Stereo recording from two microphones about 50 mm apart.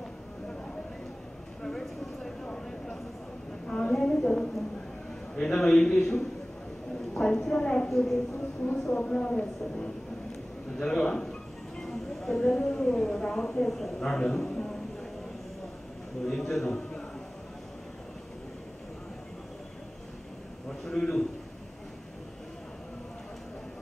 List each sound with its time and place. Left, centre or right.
1.6 s a sound: centre
3.6 s a sound: centre
5.3 s a man's voice: centre
7.9 s speech: centre
9.0 s speech: centre
10.8 s speech: centre
16.3 s a man's voice: centre
20.8 s speech: centre